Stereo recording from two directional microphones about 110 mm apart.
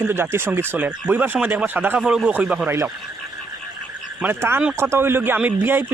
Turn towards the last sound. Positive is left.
turn(degrees=-20)  # may be behind; listen again after turning